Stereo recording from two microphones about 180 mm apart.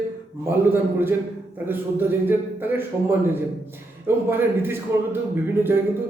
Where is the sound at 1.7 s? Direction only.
10° right (ahead or behind).